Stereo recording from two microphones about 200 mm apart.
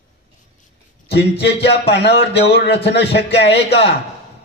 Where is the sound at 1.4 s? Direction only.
55° left (ahead or behind).